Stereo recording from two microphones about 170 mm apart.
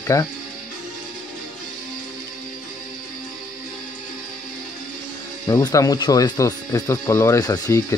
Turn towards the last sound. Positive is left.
turn(degrees=20)  # may be behind; listen again after turning